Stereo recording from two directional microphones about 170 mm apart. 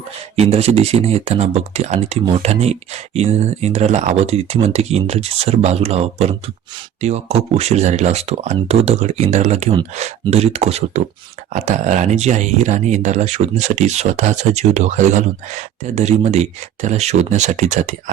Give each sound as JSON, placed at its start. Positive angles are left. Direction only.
{"t": 0.3, "sound": "speech", "side_deg": -40}